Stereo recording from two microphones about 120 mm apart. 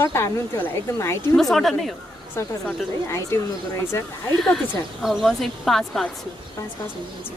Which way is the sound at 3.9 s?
20° left (ahead or behind).